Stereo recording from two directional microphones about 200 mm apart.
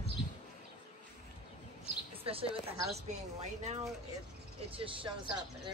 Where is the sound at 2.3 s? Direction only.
30° right (ahead or behind).